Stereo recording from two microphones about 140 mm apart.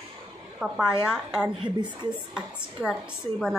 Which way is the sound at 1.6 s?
35° right (ahead or behind).